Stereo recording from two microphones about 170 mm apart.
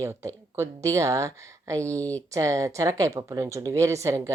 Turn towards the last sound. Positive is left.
turn(degrees=-15)  # may be behind; listen again after turning